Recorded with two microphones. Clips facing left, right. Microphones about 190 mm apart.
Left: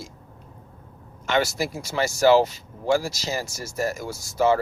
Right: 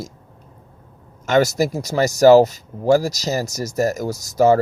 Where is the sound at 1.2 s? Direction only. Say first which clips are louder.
Right 7 dB; 40° right (ahead or behind).